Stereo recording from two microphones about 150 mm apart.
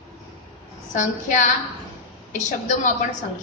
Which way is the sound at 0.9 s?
55° left (ahead or behind).